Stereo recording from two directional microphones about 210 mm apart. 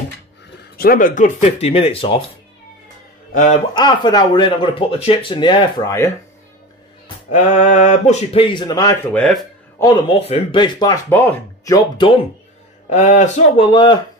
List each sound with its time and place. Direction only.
0.7 s speech: 40° left (ahead or behind); by 2.2 s 25° left (ahead or behind)
3.7 s speech: 20° left (ahead or behind)
7.2 s speech: 35° left (ahead or behind); by 9.5 s 5° left (ahead or behind)
9.8 s a man's voice: 15° left (ahead or behind)
12.9 s speech: 35° left (ahead or behind)
13.7 s speech: 20° left (ahead or behind)